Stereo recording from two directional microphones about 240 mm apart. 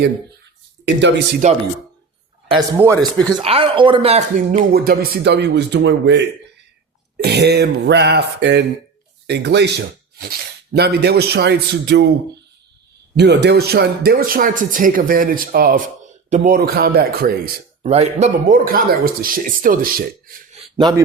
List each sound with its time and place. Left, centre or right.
1.4 s speech: right
2.5 s a man's voice: centre
2.9 s speech: centre
3.2 s speech: right
7.3 s speech: right
13.1 s speech: right
17.8 s speech: right
20.7 s a man's voice: centre